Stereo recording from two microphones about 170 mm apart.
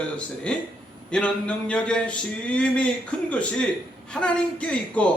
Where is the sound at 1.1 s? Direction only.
5° left (ahead or behind).